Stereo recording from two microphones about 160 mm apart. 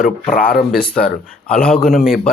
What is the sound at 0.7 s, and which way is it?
Speech, 5° left (ahead or behind).